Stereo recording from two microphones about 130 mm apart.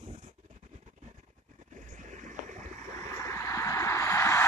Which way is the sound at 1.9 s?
75° right (ahead or behind).